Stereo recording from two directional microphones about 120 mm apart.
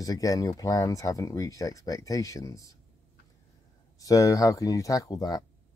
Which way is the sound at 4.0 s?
30° left (ahead or behind).